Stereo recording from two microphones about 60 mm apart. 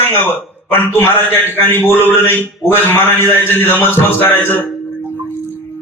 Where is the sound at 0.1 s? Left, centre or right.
Left.